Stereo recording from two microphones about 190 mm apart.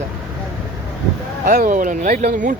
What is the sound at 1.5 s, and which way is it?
Speech, 50° right (ahead or behind).